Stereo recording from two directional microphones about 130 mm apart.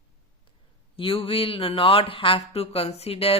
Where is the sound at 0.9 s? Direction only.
45° left (ahead or behind).